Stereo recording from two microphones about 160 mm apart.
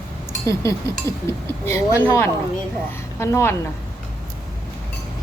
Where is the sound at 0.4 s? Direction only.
20° left (ahead or behind).